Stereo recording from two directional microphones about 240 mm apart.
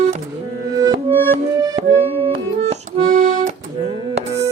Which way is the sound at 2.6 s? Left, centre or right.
Right.